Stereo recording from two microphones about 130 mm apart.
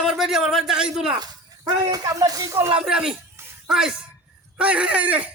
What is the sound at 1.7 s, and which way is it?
Speech, 30° right (ahead or behind).